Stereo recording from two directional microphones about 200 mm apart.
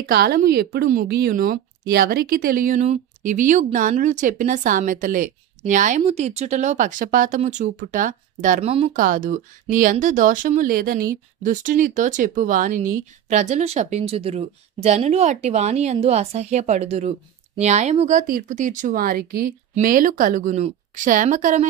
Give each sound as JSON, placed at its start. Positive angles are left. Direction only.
{"t": 0.1, "sound": "a woman's voice", "side_deg": -50}
{"t": 8.9, "sound": "a woman's voice", "side_deg": -40}